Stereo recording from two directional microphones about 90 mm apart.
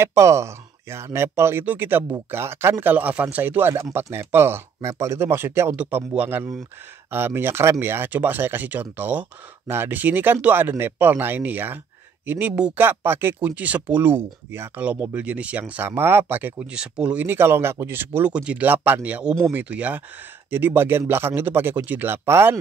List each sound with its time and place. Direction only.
0.0 s speech: 30° right (ahead or behind)
16.7 s speech: 10° right (ahead or behind)
17.4 s speech: 25° right (ahead or behind)
18.3 s speech: 15° right (ahead or behind)